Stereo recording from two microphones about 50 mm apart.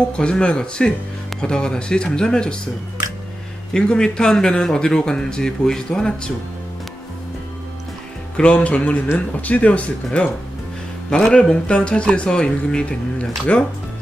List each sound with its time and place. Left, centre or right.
0.1 s speech: centre
3.7 s speech: centre
8.4 s speech: left
11.1 s speech: centre